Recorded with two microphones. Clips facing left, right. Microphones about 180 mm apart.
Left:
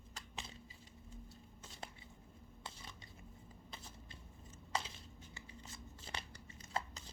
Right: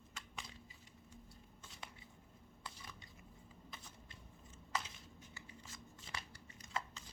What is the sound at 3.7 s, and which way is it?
Shuffling cards, 30° left (ahead or behind).